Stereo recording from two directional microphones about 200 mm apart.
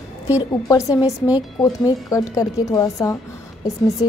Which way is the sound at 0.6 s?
15° left (ahead or behind).